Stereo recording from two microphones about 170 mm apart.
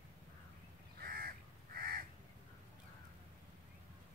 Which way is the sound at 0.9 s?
60° right (ahead or behind).